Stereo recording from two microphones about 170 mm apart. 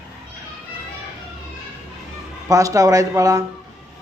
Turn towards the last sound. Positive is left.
turn(degrees=-20)  # may be behind; listen again after turning